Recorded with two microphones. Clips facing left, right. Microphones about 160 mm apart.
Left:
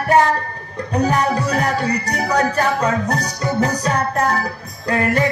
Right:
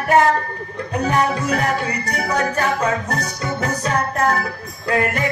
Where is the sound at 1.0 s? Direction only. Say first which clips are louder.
Even; 35° left (ahead or behind).